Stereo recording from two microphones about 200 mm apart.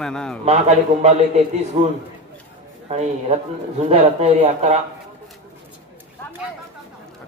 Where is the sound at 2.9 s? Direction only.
30° right (ahead or behind).